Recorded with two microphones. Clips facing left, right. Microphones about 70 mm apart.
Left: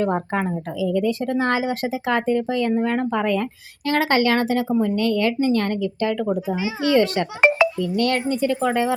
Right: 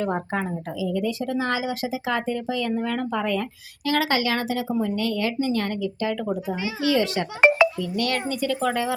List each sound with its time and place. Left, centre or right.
0.0 s speech: left
6.5 s a child's voice: centre
6.8 s speech: left